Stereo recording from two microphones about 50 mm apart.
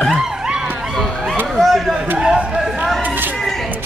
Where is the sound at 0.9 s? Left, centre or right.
Centre.